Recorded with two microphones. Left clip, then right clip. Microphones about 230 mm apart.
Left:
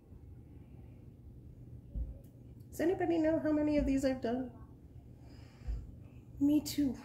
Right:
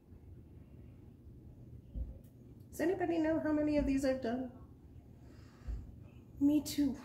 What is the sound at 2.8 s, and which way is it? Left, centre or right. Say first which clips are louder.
A woman's voice: left 2 dB; left.